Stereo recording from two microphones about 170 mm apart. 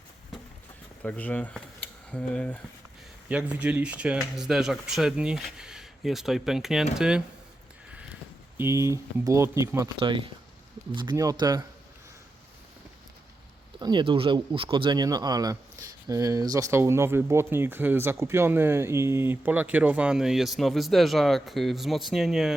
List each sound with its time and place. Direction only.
1.0 s speech: 10° left (ahead or behind)
3.2 s speech: 10° right (ahead or behind)
7.9 s speech: 10° right (ahead or behind)
10.0 s speech: 30° right (ahead or behind)
13.7 s speech: 25° right (ahead or behind); by 22.5 s centre (ahead or behind)